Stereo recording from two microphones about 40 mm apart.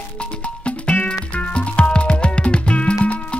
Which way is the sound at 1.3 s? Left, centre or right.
Left.